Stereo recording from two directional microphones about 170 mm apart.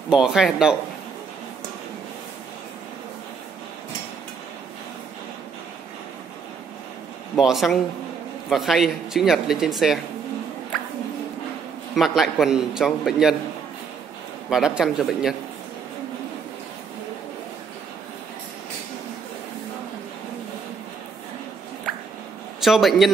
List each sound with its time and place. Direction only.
0.1 s a man's voice: 5° right (ahead or behind)
7.3 s a man's voice: centre (ahead or behind)
11.9 s a man's voice: centre (ahead or behind)
14.5 s a man's voice: 5° right (ahead or behind)
22.6 s a man's voice: centre (ahead or behind)